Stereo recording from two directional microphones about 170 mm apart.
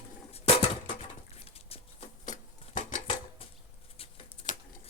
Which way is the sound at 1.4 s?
35° left (ahead or behind).